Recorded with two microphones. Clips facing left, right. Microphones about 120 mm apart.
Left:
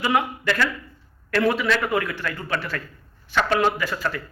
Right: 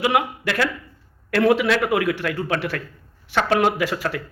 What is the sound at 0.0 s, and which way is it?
A man's voice, 65° right (ahead or behind).